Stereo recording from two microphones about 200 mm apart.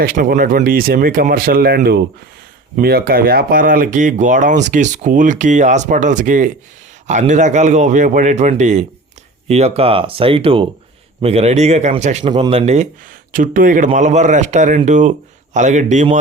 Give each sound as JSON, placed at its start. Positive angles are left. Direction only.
{"t": 0.0, "sound": "speech", "side_deg": -45}
{"t": 12.2, "sound": "speech", "side_deg": -25}